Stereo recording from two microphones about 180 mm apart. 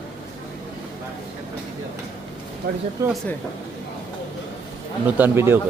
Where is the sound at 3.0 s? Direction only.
15° right (ahead or behind).